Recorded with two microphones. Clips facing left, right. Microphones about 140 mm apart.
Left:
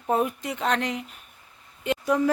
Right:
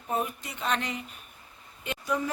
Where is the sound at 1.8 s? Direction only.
90° left.